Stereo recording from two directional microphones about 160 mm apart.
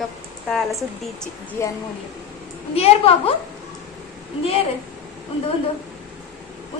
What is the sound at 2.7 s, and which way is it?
Speech, 40° left (ahead or behind).